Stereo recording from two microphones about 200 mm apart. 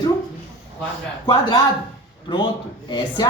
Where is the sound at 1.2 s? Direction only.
20° left (ahead or behind).